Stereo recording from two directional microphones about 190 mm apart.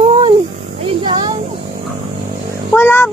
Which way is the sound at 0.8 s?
25° right (ahead or behind).